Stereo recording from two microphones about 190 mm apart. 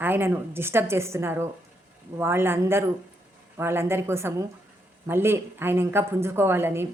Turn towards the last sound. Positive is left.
turn(degrees=-10)  # may be behind; listen again after turning